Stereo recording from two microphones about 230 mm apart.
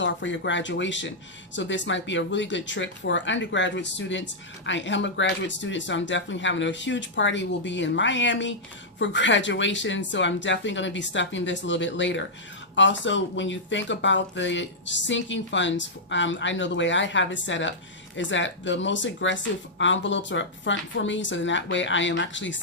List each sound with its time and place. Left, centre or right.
0.0 s speech: left